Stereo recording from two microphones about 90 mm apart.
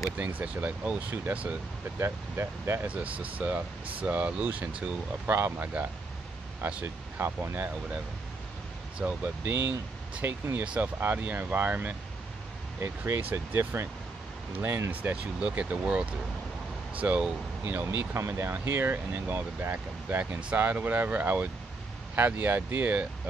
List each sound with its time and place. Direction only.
0.2 s speech: 15° right (ahead or behind)